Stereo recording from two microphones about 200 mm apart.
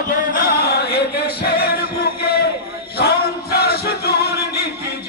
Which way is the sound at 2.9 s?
50° left (ahead or behind).